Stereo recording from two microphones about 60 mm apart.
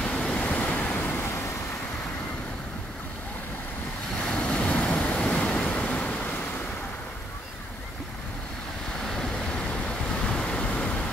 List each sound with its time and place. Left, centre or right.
0.0 s waves: centre
1.2 s vehicle: left
4.2 s waves: centre
9.0 s vehicle: centre